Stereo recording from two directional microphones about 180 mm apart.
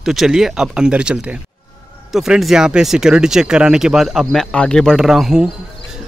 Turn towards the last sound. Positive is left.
turn(degrees=-5)  # may be behind; listen again after turning